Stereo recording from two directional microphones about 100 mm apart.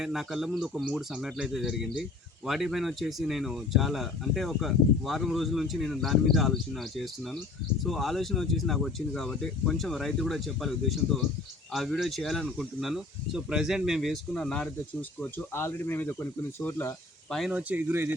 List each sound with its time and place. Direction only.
0.0 s speech: 5° right (ahead or behind)
15.2 s speech: 20° left (ahead or behind)
17.2 s speech: centre (ahead or behind)
17.5 s speech: 15° right (ahead or behind)